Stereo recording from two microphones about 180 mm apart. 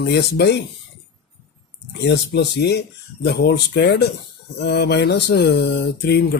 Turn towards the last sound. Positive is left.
turn(degrees=65)  # may be behind; listen again after turning